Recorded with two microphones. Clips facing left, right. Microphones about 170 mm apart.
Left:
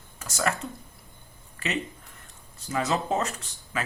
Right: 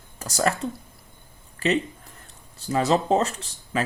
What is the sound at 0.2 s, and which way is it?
Speech, 35° right (ahead or behind).